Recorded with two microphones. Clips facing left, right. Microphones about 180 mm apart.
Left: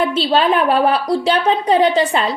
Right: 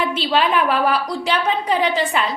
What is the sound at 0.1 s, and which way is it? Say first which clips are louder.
A woman's voice: left 4 dB; 30° left (ahead or behind).